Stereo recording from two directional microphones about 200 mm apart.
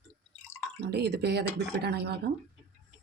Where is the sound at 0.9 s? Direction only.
55° right (ahead or behind).